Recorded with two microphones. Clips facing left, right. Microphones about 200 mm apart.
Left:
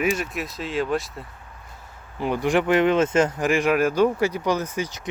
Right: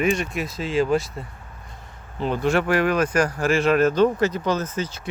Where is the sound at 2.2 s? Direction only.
15° left (ahead or behind).